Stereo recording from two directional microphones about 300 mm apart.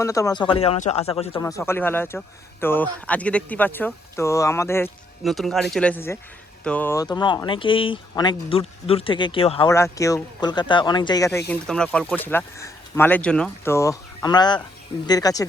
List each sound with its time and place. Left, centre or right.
0.0 s speech: centre